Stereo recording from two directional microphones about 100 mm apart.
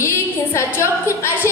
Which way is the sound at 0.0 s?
25° left (ahead or behind).